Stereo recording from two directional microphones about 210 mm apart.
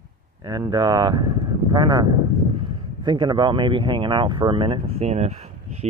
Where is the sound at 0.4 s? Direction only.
20° right (ahead or behind).